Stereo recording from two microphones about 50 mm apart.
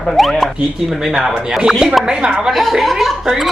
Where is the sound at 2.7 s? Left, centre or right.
Centre.